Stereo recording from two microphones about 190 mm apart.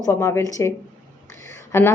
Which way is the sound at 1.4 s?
15° left (ahead or behind).